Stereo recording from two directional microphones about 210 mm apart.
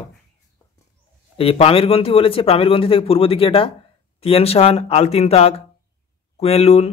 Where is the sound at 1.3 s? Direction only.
25° left (ahead or behind).